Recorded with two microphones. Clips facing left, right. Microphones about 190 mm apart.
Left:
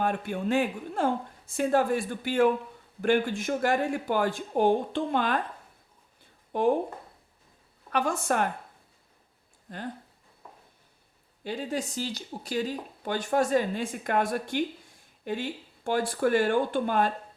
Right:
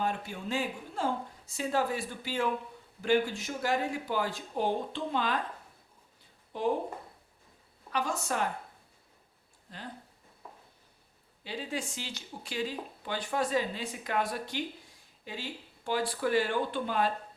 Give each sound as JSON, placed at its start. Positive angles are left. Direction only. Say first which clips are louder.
{"t": 0.0, "sound": "a woman's voice", "louder": "left 5 dB", "side_deg": 55}
{"t": 6.5, "sound": "speech", "louder": "left 6 dB", "side_deg": 55}
{"t": 7.9, "sound": "a woman's voice", "louder": "left 5 dB", "side_deg": 55}
{"t": 9.7, "sound": "speech", "louder": "left 7 dB", "side_deg": 50}
{"t": 10.4, "sound": "a sound", "louder": "even", "side_deg": 0}
{"t": 11.4, "sound": "speech", "louder": "left 5 dB", "side_deg": 45}